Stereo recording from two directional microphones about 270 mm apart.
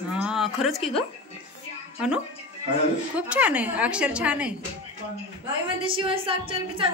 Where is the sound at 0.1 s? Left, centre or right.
Centre.